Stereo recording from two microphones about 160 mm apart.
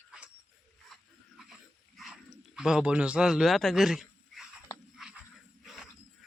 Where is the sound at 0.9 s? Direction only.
Centre (ahead or behind).